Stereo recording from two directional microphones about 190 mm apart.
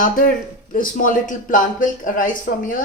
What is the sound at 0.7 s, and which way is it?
Speech, 45° left (ahead or behind).